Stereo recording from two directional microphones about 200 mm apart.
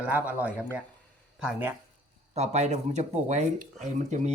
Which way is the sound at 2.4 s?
35° right (ahead or behind).